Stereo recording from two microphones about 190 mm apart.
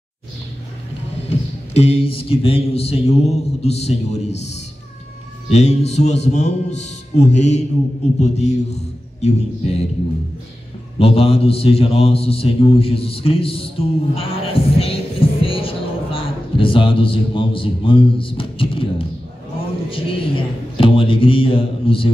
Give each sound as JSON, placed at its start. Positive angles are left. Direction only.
{"t": 1.7, "sound": "a man's voice", "side_deg": 30}
{"t": 5.5, "sound": "a man's voice", "side_deg": 35}
{"t": 11.0, "sound": "a man's voice", "side_deg": 30}
{"t": 19.9, "sound": "a sound", "side_deg": 30}